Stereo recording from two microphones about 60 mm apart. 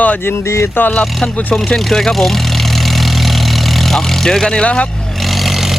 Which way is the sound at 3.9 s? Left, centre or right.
Centre.